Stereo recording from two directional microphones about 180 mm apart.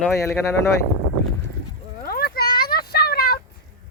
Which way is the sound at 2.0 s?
55° left (ahead or behind).